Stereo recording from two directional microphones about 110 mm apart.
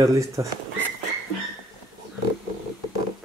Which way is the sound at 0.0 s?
30° right (ahead or behind).